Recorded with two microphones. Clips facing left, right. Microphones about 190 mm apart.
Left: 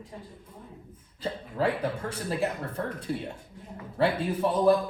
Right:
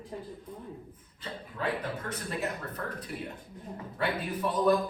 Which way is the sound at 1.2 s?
30° left (ahead or behind).